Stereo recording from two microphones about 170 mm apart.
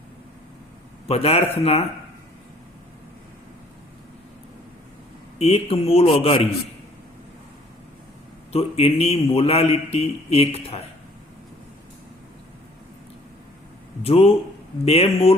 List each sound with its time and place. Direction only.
1.0 s a man's voice: 35° left (ahead or behind)
5.4 s a man's voice: 35° left (ahead or behind)
8.5 s a man's voice: 35° left (ahead or behind)
14.0 s a man's voice: 35° left (ahead or behind)